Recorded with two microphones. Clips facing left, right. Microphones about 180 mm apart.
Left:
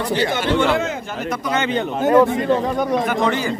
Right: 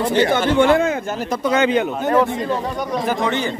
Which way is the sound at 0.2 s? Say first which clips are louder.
Right 4 dB; 50° right (ahead or behind).